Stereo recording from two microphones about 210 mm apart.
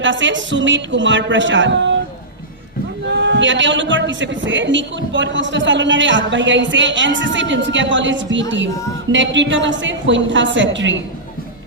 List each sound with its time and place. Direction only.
0.0 s a man's voice: 60° right (ahead or behind)
3.2 s a man's voice: 55° right (ahead or behind)